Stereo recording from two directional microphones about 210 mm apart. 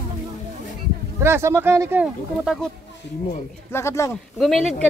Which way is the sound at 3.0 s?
55° left (ahead or behind).